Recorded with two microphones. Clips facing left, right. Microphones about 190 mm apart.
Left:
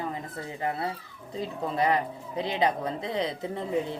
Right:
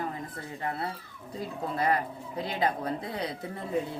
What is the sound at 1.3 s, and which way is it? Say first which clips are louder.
Speech: left 3 dB; 20° left (ahead or behind).